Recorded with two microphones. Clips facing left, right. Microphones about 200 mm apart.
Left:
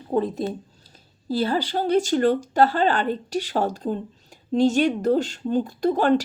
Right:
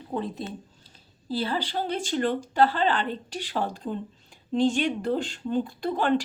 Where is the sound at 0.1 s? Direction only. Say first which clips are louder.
Left 8 dB; 40° left (ahead or behind).